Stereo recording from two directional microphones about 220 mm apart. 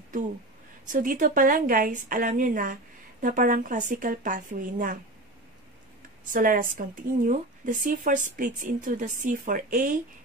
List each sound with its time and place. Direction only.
0.8 s a woman's voice: 35° right (ahead or behind)
6.3 s a woman's voice: 40° right (ahead or behind)